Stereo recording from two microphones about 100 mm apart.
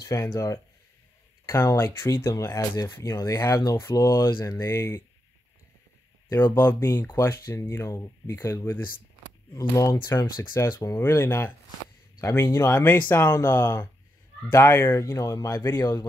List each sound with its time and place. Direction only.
0.0 s speech: 30° left (ahead or behind)
6.3 s speech: 25° left (ahead or behind)
11.0 s speech: 25° left (ahead or behind)
12.2 s speech: 35° left (ahead or behind)
12.7 s speech: 20° left (ahead or behind)
15.7 s a man's voice: 40° left (ahead or behind)